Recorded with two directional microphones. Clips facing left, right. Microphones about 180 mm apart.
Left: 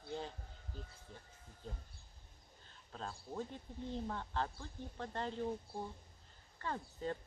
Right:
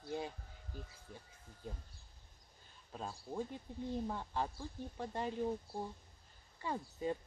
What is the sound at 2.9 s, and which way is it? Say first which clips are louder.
Speech: right 2 dB; 10° right (ahead or behind).